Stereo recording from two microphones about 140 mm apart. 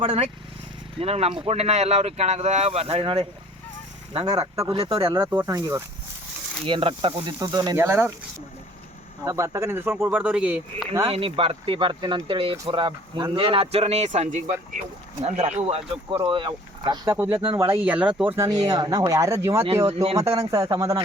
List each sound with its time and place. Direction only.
0.0 s speech: 40° right (ahead or behind)
4.3 s speech: 25° right (ahead or behind)
4.7 s speech: 40° right (ahead or behind)
5.1 s speech: 20° right (ahead or behind)
6.7 s speech: 40° right (ahead or behind)
7.3 s speech: 30° right (ahead or behind)
7.8 s speech: 15° right (ahead or behind)
9.2 s speech: 25° right (ahead or behind)
11.1 s speech: 40° right (ahead or behind)
17.1 s speech: 15° right (ahead or behind)
19.9 s speech: 45° right (ahead or behind)
20.1 s speech: 25° right (ahead or behind)